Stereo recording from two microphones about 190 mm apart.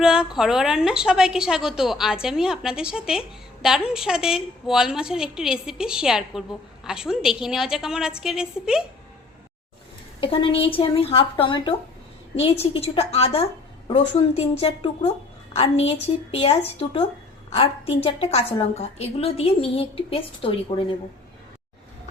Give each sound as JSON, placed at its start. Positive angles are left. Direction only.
{"t": 0.0, "sound": "a woman's voice", "side_deg": -5}
{"t": 10.2, "sound": "a woman's voice", "side_deg": 30}
{"t": 12.7, "sound": "a woman's voice", "side_deg": 30}